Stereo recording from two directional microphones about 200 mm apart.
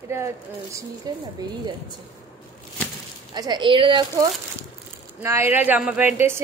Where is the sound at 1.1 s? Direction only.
20° right (ahead or behind).